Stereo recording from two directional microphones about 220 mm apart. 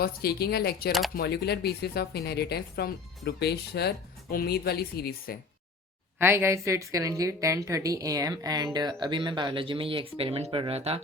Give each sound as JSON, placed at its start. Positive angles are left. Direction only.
{"t": 0.0, "sound": "speech", "side_deg": 45}
{"t": 6.1, "sound": "a woman's voice", "side_deg": -10}